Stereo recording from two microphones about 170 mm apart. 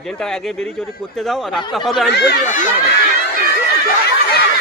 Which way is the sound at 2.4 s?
50° left (ahead or behind).